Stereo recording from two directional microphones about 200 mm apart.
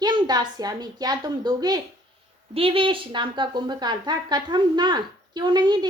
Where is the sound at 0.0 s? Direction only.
20° right (ahead or behind).